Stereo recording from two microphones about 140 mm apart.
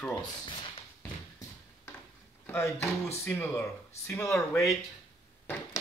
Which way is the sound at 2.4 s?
15° left (ahead or behind).